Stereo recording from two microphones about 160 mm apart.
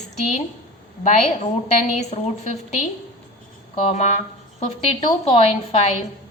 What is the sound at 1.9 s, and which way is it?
Speech, 45° left (ahead or behind).